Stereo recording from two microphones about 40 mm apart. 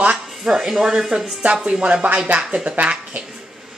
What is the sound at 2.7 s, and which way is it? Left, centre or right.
Speech, right.